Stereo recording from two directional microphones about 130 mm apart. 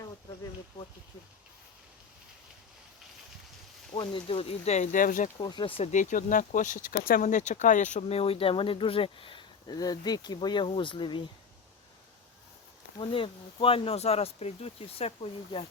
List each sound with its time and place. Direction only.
4.0 s speech: 45° left (ahead or behind); by 5.3 s 90° left
5.4 s speech: 35° left (ahead or behind)
5.9 s speech: 70° left (ahead or behind)
8.2 s speech: 45° left (ahead or behind)
13.0 s speech: 40° left (ahead or behind)